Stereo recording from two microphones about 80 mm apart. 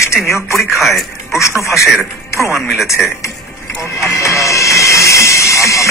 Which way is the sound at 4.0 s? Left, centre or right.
Left.